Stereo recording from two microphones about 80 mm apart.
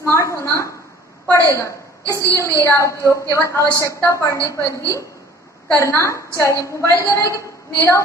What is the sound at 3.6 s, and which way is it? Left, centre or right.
Speech, right.